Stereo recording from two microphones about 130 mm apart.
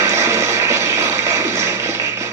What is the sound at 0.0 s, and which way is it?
Music, 20° right (ahead or behind).